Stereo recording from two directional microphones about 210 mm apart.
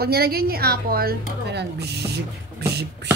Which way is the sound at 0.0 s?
45° right (ahead or behind).